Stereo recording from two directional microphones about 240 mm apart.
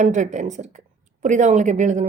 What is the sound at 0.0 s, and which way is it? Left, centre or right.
A woman's voice, right.